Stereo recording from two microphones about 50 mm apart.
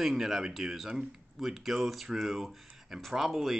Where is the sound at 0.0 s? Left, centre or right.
Centre.